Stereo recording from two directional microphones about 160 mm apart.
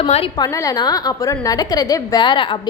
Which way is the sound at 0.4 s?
20° left (ahead or behind).